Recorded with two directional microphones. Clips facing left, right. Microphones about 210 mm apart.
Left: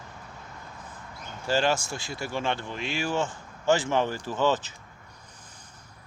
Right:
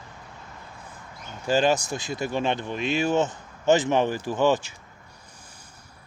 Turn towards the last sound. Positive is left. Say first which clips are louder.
# right 3 dB
turn(degrees=-15)  # may be behind; listen again after turning